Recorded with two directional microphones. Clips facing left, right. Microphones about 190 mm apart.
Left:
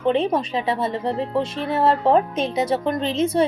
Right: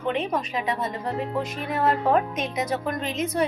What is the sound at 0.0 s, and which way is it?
A woman's voice, 30° left (ahead or behind).